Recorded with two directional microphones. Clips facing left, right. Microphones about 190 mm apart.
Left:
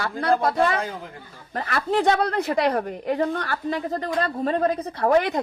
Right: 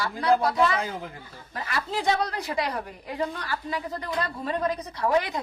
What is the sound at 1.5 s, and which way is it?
A woman's voice, 50° left (ahead or behind).